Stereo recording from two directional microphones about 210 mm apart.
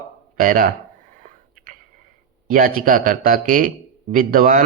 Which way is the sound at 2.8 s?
40° right (ahead or behind).